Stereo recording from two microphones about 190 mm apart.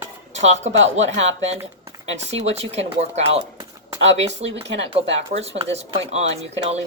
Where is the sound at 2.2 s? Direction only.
35° right (ahead or behind).